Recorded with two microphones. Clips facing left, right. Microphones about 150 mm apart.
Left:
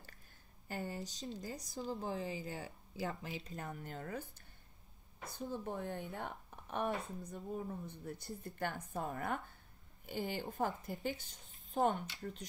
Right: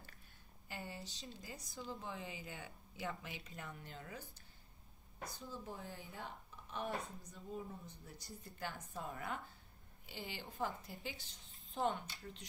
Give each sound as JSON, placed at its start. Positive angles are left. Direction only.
{"t": 0.7, "sound": "a woman's voice", "side_deg": 45}